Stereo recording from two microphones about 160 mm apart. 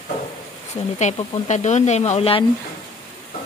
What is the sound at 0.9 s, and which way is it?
Speech, 45° left (ahead or behind).